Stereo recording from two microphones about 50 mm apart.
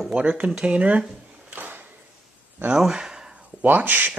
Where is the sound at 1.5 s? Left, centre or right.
Right.